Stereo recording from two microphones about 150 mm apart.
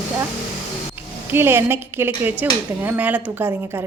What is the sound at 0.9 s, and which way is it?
A woman's voice, 15° right (ahead or behind).